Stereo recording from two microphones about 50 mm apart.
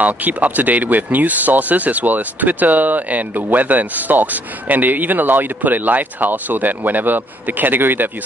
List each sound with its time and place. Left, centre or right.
0.0 s speech: right